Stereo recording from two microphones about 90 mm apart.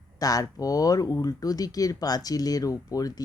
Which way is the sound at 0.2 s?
45° left (ahead or behind).